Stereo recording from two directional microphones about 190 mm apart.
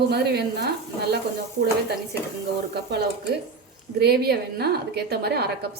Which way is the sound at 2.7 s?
60° right (ahead or behind).